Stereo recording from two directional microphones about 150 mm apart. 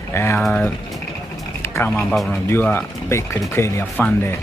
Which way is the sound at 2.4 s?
15° left (ahead or behind).